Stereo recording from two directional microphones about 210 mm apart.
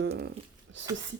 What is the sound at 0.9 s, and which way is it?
Speech, 15° right (ahead or behind).